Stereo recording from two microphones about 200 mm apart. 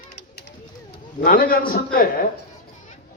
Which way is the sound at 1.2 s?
45° left (ahead or behind).